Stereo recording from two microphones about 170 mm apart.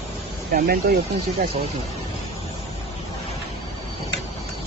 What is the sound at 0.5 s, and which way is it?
Speech, 65° right (ahead or behind).